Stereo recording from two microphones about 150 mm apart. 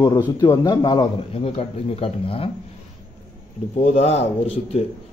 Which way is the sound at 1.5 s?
40° left (ahead or behind).